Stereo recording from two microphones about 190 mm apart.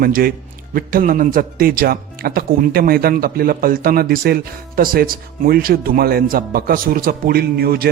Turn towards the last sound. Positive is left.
turn(degrees=-55)  # may be behind; listen again after turning